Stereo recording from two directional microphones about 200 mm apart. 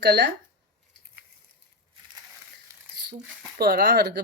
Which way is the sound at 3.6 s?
55° right (ahead or behind).